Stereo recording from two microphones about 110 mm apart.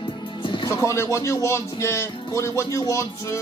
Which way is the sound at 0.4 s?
45° left (ahead or behind).